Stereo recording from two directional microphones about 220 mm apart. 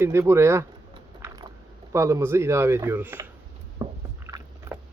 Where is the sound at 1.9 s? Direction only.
15° right (ahead or behind).